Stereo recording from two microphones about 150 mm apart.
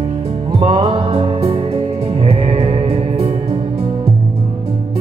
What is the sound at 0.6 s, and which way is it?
Music, 35° right (ahead or behind).